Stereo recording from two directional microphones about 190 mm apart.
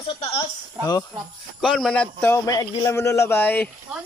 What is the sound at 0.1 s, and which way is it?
Speech, 30° left (ahead or behind).